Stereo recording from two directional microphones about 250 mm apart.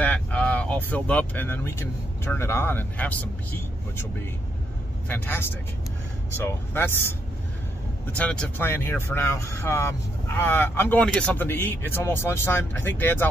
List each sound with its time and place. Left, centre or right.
0.0 s vehicle: centre
2.2 s speech: centre
5.0 s speech: centre
8.2 s speech: centre